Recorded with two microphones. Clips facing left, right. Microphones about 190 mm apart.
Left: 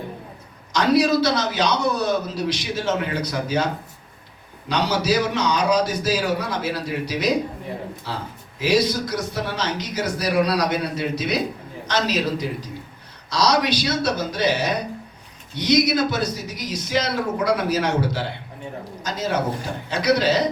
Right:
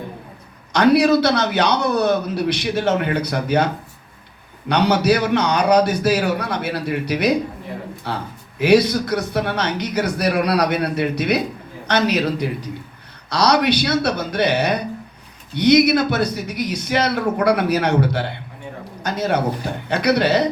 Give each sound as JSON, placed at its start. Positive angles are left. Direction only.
{"t": 0.7, "sound": "a man's voice", "side_deg": -60}
{"t": 4.7, "sound": "a man's voice", "side_deg": -60}